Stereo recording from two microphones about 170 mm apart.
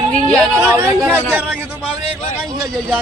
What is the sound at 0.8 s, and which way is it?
Speech, 10° right (ahead or behind).